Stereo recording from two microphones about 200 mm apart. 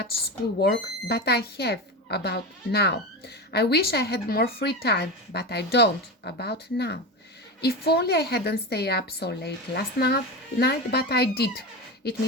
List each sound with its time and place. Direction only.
0.6 s speech: 55° left (ahead or behind)